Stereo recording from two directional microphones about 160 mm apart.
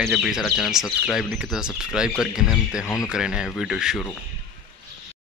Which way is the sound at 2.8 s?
20° left (ahead or behind).